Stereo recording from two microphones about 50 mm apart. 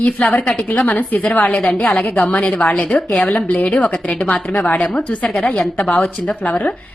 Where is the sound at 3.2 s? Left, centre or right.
Left.